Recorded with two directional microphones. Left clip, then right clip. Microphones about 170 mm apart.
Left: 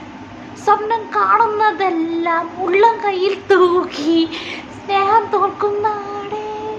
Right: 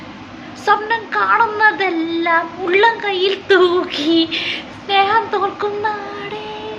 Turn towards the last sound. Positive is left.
turn(degrees=25)  # may be behind; listen again after turning